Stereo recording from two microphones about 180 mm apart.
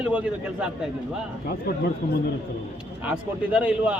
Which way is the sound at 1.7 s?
60° left (ahead or behind).